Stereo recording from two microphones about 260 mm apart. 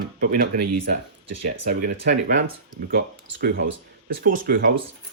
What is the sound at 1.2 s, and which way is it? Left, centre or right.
Speech, right.